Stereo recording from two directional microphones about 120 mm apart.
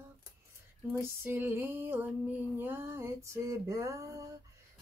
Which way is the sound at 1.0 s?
20° right (ahead or behind).